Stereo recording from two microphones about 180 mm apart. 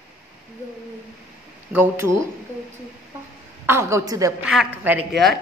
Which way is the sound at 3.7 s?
15° right (ahead or behind).